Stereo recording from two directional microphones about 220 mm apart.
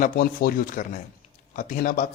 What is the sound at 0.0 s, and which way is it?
A man's voice, 40° left (ahead or behind).